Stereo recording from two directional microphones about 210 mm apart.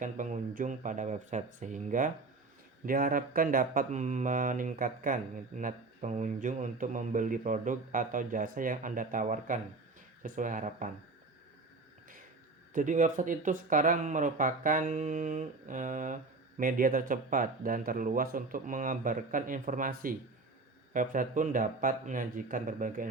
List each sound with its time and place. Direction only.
0.0 s speech: 35° right (ahead or behind)
12.7 s speech: 40° right (ahead or behind)